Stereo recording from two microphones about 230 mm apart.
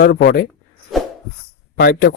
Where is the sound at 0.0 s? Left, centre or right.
Left.